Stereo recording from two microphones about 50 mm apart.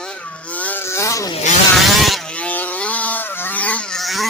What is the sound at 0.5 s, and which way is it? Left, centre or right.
Vehicle, left.